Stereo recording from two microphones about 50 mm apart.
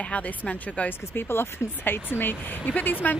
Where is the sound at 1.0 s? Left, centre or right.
Left.